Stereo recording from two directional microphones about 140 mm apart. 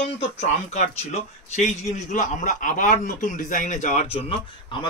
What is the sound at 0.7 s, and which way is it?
A man's voice, 50° left (ahead or behind).